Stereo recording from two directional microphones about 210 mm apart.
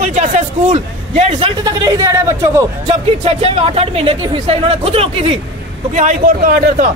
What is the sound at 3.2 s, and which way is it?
A man's voice, 30° right (ahead or behind).